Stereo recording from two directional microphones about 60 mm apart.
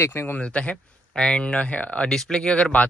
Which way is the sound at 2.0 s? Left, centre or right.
Centre.